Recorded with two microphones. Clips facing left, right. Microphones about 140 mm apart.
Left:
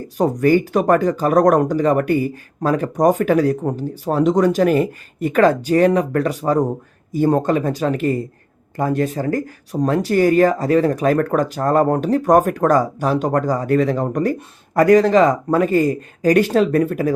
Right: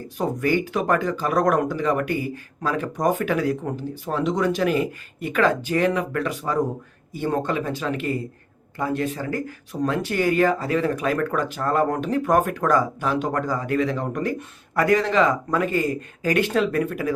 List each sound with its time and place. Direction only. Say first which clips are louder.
0.2 s speech: left 7 dB; 45° left (ahead or behind)